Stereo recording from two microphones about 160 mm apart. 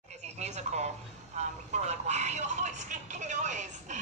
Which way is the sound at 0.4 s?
45° right (ahead or behind).